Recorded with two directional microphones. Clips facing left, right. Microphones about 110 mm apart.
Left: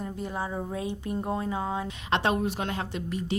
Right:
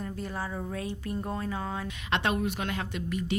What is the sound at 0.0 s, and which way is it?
Speech, 20° left (ahead or behind).